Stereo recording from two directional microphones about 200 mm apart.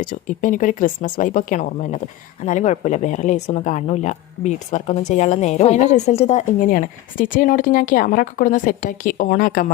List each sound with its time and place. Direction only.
0.0 s speech: 40° left (ahead or behind)